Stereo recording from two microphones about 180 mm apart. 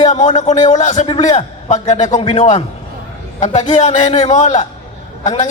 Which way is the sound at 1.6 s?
40° left (ahead or behind).